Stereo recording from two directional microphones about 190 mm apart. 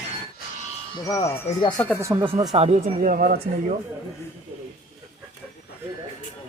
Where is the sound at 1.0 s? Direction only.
20° left (ahead or behind).